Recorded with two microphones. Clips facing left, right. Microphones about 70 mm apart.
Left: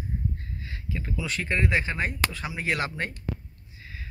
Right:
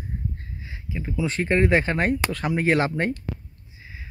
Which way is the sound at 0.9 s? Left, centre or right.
Centre.